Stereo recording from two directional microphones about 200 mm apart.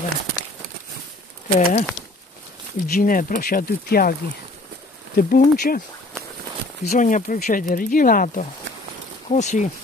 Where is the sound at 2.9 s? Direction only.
45° left (ahead or behind).